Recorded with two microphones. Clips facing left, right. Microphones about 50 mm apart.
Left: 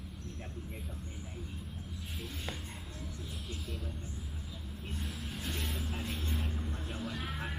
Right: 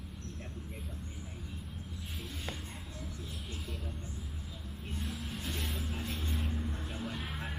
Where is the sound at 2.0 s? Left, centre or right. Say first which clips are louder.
Left 1 dB; centre.